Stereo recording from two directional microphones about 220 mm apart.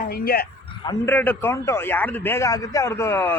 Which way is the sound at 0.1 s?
45° left (ahead or behind).